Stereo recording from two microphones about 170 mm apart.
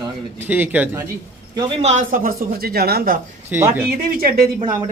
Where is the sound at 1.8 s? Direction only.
50° right (ahead or behind).